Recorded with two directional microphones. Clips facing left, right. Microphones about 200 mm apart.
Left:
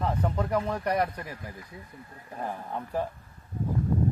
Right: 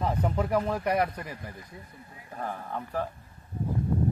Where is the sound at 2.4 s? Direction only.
15° left (ahead or behind).